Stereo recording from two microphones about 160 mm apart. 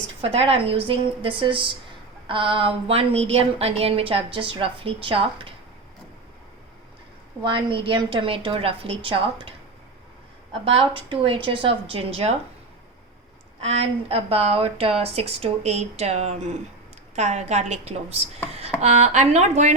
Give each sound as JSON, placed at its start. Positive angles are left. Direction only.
{"t": 0.2, "sound": "a woman's voice", "side_deg": -35}
{"t": 7.4, "sound": "a woman's voice", "side_deg": -30}
{"t": 10.7, "sound": "a woman's voice", "side_deg": -35}
{"t": 13.6, "sound": "a woman's voice", "side_deg": -40}